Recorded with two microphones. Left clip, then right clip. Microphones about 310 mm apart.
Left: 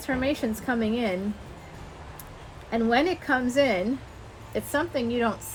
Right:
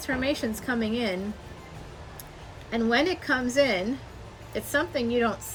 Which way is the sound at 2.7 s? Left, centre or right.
Centre.